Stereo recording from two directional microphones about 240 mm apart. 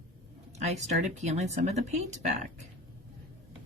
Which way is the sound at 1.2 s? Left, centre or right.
Right.